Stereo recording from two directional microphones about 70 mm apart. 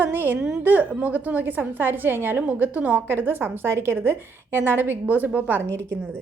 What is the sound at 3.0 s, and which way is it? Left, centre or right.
A woman's voice, right.